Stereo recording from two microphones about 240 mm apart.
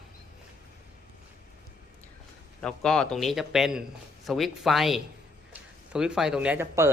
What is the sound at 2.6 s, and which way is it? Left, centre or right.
A man's voice, centre.